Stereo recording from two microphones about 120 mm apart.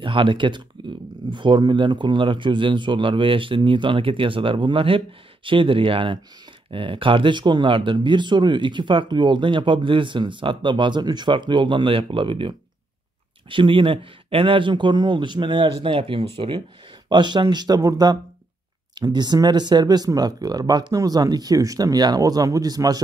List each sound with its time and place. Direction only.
0.0 s speech: 45° right (ahead or behind)